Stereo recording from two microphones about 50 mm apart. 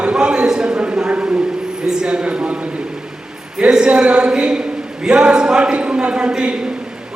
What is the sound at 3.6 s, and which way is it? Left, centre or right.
A man's voice, centre.